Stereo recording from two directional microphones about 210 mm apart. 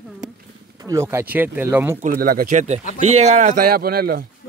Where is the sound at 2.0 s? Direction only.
45° right (ahead or behind).